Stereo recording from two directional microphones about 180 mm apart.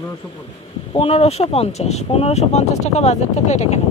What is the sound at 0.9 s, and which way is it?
Speech, 35° left (ahead or behind).